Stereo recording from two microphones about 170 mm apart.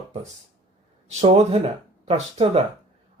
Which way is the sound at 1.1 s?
35° right (ahead or behind).